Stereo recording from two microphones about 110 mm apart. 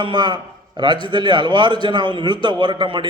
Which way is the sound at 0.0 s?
45° right (ahead or behind).